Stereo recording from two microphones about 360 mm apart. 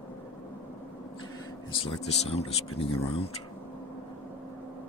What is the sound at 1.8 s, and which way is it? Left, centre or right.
Speech, centre.